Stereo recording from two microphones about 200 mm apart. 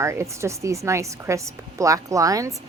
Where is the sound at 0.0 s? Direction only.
15° right (ahead or behind).